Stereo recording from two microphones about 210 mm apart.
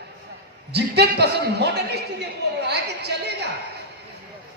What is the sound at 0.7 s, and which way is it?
Speech, 50° right (ahead or behind).